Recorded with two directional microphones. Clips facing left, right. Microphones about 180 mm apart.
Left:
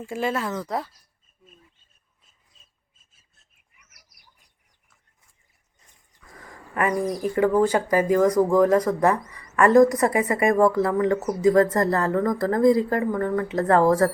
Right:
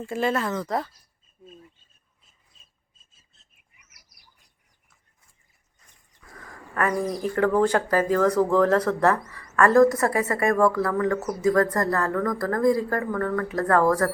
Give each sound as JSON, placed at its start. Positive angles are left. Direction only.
{"t": 0.0, "sound": "speech", "side_deg": 10}
{"t": 6.7, "sound": "speech", "side_deg": 15}